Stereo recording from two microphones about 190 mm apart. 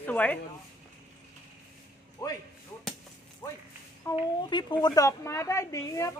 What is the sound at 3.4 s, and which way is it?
Speech, 10° left (ahead or behind).